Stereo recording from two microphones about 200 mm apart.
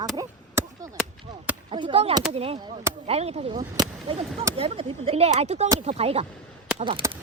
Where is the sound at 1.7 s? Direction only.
25° right (ahead or behind).